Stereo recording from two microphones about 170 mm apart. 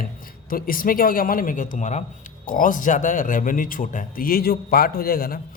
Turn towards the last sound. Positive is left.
turn(degrees=60)  # may be behind; listen again after turning